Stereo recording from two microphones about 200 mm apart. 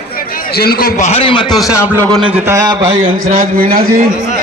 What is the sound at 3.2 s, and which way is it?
Speech, 45° right (ahead or behind).